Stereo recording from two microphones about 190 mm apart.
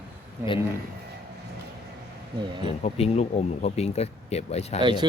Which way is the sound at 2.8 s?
35° left (ahead or behind).